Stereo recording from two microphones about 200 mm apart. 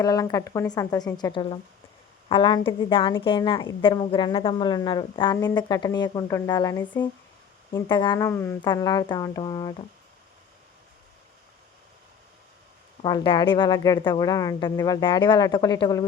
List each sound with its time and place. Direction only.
0.0 s a woman's voice: 15° left (ahead or behind)
13.0 s speech: 25° left (ahead or behind)